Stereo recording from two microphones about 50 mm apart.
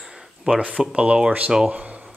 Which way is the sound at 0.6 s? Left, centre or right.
Right.